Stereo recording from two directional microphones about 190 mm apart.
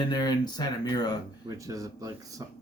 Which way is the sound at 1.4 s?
15° right (ahead or behind).